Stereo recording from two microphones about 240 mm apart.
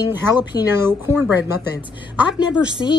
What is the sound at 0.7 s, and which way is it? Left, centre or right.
A woman's voice, centre.